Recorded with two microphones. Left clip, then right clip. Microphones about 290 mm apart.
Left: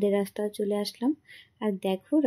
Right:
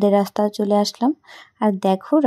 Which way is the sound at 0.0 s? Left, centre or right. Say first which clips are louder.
Right 9 dB; right.